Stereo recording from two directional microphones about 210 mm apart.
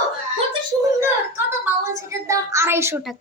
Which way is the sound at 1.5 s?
15° right (ahead or behind).